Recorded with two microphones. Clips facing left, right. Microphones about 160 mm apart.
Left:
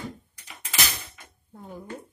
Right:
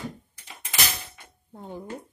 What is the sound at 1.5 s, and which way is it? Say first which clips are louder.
Dishes: right 2 dB; 25° right (ahead or behind).